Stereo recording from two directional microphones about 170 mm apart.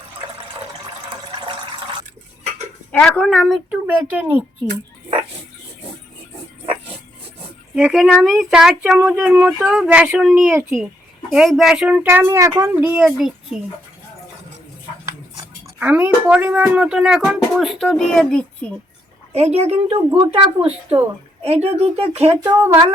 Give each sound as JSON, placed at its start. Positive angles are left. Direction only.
{"t": 1.4, "sound": "water", "side_deg": -30}
{"t": 2.9, "sound": "speech", "side_deg": 5}
{"t": 7.8, "sound": "speech", "side_deg": -5}
{"t": 15.0, "sound": "speech", "side_deg": -15}
{"t": 19.3, "sound": "speech", "side_deg": -40}
{"t": 22.4, "sound": "speech", "side_deg": -15}